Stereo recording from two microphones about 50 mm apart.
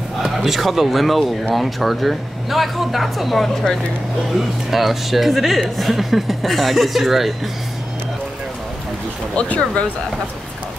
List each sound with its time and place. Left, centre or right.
0.2 s speech: centre
4.6 s speech: centre
9.4 s speech: left